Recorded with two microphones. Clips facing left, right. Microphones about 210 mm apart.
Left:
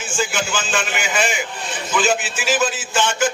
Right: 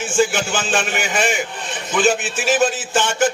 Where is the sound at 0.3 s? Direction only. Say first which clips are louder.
Right 2 dB; 45° right (ahead or behind).